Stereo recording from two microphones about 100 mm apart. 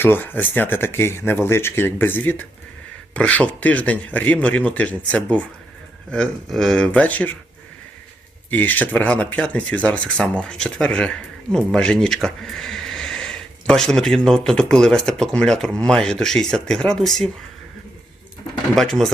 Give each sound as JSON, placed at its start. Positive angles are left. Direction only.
{"t": 0.0, "sound": "speech", "side_deg": 20}
{"t": 8.4, "sound": "speech", "side_deg": 15}
{"t": 18.8, "sound": "speech", "side_deg": 5}